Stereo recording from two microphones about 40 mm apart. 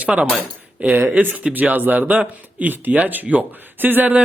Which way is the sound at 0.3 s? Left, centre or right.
Right.